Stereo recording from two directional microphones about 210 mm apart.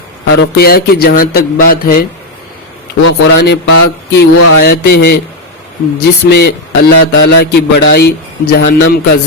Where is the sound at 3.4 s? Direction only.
55° left (ahead or behind).